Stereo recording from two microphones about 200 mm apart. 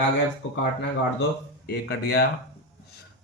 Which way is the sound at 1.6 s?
50° left (ahead or behind).